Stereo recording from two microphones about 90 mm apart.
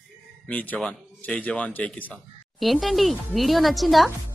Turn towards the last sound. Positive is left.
turn(degrees=0)  # may be behind; listen again after turning